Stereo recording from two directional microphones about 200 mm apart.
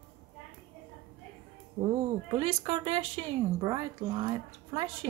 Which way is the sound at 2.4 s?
25° right (ahead or behind).